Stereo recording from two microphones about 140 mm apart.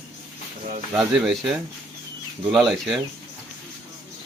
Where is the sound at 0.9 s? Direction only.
Centre (ahead or behind).